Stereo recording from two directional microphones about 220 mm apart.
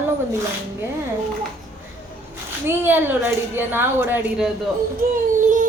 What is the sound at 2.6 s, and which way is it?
A woman's voice, 10° right (ahead or behind).